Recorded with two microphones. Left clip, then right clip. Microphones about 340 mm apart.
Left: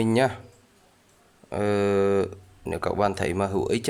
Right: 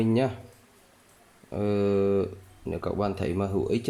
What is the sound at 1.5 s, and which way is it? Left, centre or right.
Speech, left.